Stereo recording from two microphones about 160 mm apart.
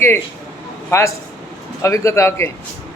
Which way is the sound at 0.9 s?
15° left (ahead or behind).